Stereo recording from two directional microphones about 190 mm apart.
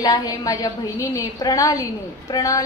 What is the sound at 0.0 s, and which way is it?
A woman's voice, 20° left (ahead or behind).